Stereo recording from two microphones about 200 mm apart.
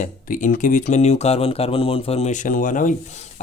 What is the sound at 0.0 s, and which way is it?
Speech, 40° left (ahead or behind).